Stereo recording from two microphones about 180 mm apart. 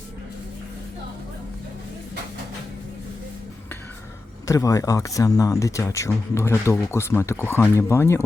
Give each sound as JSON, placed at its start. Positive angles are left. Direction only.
{"t": 4.4, "sound": "speech", "side_deg": 20}